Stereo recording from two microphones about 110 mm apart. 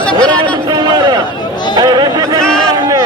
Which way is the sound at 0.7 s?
40° right (ahead or behind).